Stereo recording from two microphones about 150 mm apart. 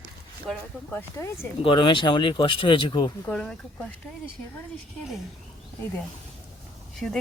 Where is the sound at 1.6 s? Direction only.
35° left (ahead or behind).